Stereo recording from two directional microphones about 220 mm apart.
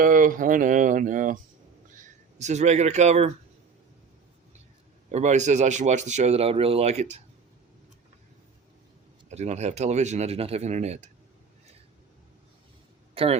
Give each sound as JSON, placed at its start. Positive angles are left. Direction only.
{"t": 0.0, "sound": "speech", "side_deg": -40}
{"t": 2.4, "sound": "speech", "side_deg": -30}
{"t": 5.1, "sound": "speech", "side_deg": -30}
{"t": 9.3, "sound": "speech", "side_deg": -30}
{"t": 13.2, "sound": "speech", "side_deg": -25}